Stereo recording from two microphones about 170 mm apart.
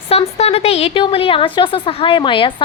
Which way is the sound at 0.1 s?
35° left (ahead or behind).